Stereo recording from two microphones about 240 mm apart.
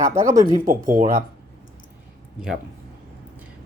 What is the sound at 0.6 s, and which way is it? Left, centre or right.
Speech, right.